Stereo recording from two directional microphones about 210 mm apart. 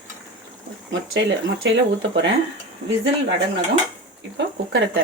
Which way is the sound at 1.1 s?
65° right (ahead or behind).